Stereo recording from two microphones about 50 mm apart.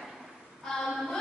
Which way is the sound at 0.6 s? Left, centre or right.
Centre.